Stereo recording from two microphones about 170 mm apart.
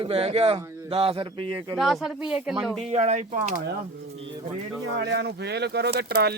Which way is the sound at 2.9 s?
40° right (ahead or behind).